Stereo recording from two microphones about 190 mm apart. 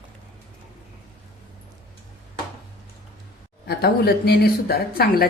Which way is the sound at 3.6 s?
55° left (ahead or behind).